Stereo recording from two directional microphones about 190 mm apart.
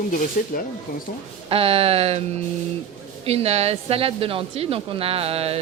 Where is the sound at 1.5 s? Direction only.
30° right (ahead or behind).